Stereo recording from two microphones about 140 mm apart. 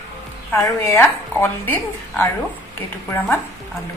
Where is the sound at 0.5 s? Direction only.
15° left (ahead or behind).